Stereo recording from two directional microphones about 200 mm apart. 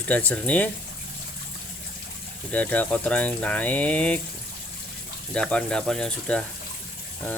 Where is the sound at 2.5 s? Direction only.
10° left (ahead or behind).